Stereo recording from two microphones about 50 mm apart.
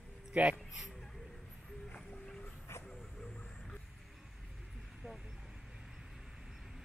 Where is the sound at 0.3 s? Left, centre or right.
Right.